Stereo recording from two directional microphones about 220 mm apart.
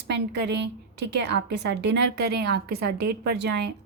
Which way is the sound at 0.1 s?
50° right (ahead or behind).